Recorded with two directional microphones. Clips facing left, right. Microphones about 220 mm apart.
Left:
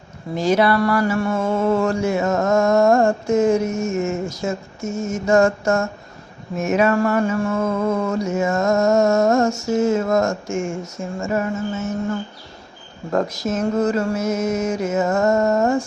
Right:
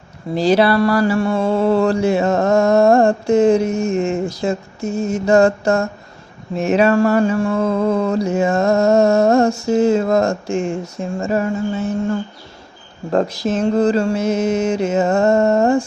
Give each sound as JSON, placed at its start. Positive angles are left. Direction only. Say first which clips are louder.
{"t": 0.3, "sound": "mantra", "louder": "right 3 dB", "side_deg": -30}
{"t": 13.1, "sound": "mantra", "louder": "right 3 dB", "side_deg": -30}